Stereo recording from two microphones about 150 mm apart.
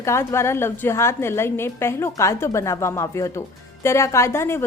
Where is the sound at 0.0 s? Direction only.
20° left (ahead or behind).